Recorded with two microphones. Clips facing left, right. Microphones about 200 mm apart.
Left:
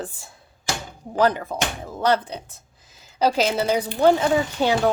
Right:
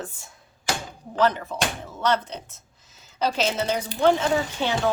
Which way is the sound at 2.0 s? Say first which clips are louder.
Left 3 dB; 35° left (ahead or behind).